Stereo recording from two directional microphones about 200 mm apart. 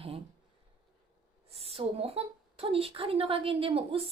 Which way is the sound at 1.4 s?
30° right (ahead or behind).